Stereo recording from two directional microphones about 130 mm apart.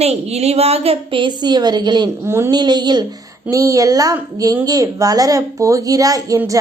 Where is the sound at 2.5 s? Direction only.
35° right (ahead or behind).